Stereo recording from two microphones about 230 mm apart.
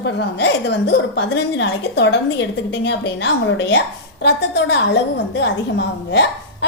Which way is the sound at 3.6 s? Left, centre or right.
Left.